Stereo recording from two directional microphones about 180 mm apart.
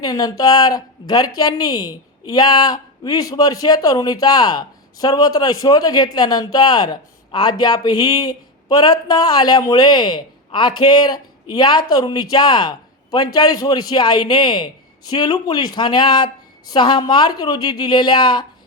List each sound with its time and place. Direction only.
0.0 s a man's voice: 20° left (ahead or behind)